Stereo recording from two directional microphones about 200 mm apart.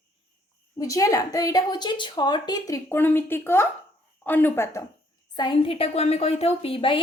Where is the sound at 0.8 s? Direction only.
15° left (ahead or behind).